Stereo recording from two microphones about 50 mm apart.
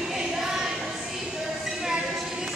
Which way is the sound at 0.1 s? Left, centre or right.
Centre.